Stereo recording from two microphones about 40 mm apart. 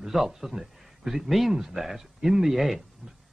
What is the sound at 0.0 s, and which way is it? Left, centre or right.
A man's voice, centre.